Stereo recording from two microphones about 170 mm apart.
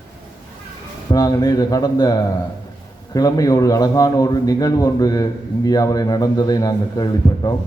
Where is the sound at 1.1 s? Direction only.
20° left (ahead or behind).